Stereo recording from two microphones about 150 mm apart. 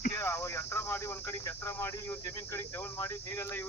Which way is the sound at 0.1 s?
15° left (ahead or behind).